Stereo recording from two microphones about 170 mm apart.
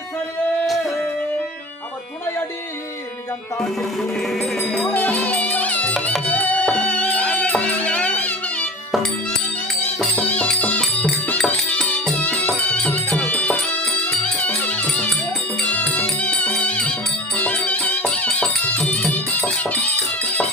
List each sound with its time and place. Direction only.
4.3 s music: 5° left (ahead or behind)
9.8 s music: 10° left (ahead or behind)